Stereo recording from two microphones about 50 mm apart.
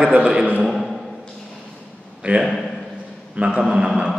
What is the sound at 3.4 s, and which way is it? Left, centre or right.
Speech, right.